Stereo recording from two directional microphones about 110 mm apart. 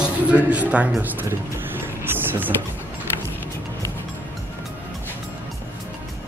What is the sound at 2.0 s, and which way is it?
Music, 15° right (ahead or behind).